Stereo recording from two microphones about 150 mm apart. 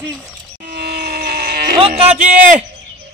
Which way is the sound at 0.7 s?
90° right.